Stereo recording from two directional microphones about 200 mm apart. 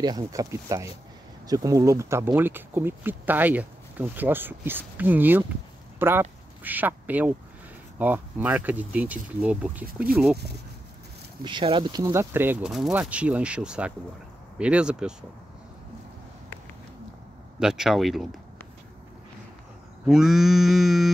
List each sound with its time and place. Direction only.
0.0 s speech: 20° right (ahead or behind)
10.3 s speech: 55° right (ahead or behind)
11.4 s speech: 25° right (ahead or behind); by 13.9 s 5° right (ahead or behind)
14.6 s grunt: 5° right (ahead or behind)
17.6 s grunt: centre (ahead or behind)
20.1 s grunt: centre (ahead or behind)